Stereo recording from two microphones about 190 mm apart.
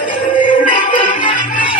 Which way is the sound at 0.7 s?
45° left (ahead or behind).